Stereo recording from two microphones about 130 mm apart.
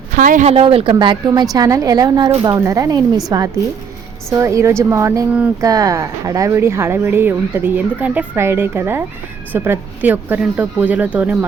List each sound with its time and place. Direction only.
0.2 s speech: 80° right
0.4 s speech: 50° right (ahead or behind); by 11.4 s 10° right (ahead or behind)